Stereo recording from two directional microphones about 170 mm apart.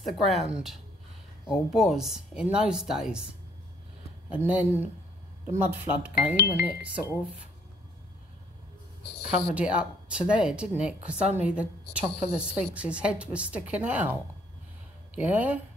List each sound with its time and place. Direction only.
0.0 s a woman's voice: centre (ahead or behind)
1.5 s a woman's voice: centre (ahead or behind)
4.5 s a woman's voice: 10° right (ahead or behind)
6.3 s speech: 70° left (ahead or behind)
6.6 s a woman's voice: 10° right (ahead or behind)
9.5 s a woman's voice: 5° right (ahead or behind)
15.1 s a woman's voice: 10° right (ahead or behind)